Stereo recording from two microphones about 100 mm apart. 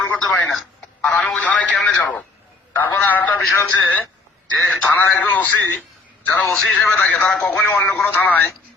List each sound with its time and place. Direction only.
0.0 s a sound: 15° left (ahead or behind)
1.1 s radio: 10° left (ahead or behind)
2.8 s a sound: 20° left (ahead or behind)
3.5 s a man's voice: 20° left (ahead or behind)
4.5 s a man's voice: centre (ahead or behind)
4.8 s speech: 15° left (ahead or behind)